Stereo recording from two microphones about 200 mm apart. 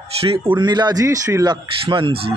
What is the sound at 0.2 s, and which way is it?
A man's voice, 25° right (ahead or behind).